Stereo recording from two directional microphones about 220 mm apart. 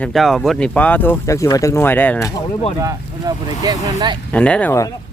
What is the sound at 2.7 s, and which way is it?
Speech, 15° right (ahead or behind).